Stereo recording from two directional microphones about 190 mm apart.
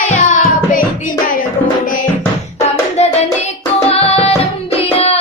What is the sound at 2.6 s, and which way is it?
Hands, 35° left (ahead or behind).